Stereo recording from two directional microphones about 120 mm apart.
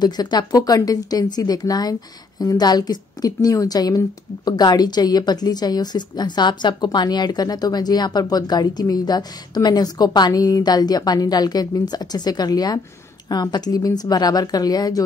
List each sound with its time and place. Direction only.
0.0 s a woman's voice: 35° left (ahead or behind)